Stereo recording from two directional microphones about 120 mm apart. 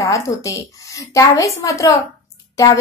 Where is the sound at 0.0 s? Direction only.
25° left (ahead or behind).